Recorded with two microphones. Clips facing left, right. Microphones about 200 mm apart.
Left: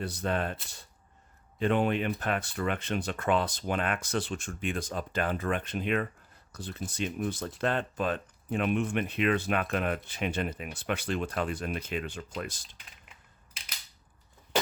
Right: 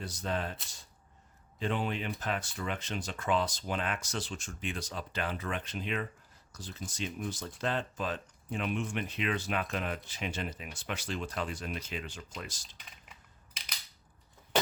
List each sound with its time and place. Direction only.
0.0 s speech: 60° left (ahead or behind)